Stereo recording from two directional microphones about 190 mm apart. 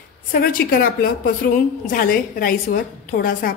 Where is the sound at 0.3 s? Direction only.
50° left (ahead or behind).